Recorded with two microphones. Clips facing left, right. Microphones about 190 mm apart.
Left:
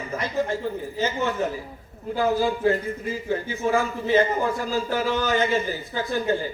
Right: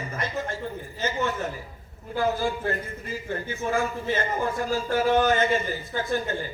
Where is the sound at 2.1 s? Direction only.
55° right (ahead or behind).